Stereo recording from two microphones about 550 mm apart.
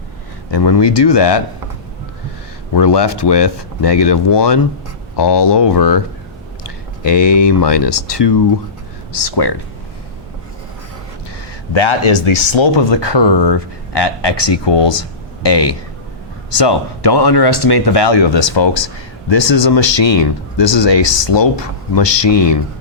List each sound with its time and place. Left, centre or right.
0.5 s speech: left
2.7 s speech: left
7.0 s speech: left
11.7 s speech: left